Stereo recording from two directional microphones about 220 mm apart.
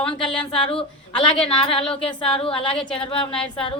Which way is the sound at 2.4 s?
25° left (ahead or behind).